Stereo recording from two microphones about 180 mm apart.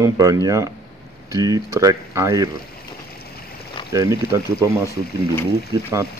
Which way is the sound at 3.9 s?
15° right (ahead or behind).